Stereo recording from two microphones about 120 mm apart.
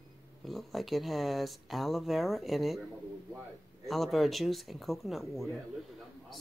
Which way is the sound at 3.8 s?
Centre (ahead or behind).